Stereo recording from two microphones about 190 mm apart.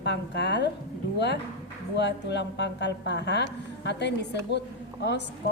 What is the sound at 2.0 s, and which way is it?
A woman's voice, 65° left (ahead or behind).